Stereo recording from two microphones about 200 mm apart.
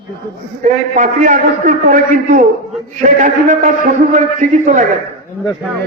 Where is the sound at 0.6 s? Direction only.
40° right (ahead or behind).